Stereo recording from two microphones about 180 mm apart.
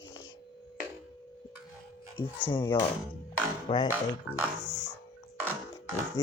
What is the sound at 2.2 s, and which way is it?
Speech, 30° left (ahead or behind).